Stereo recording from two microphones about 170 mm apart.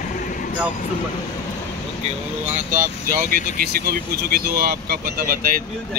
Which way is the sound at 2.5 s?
50° right (ahead or behind).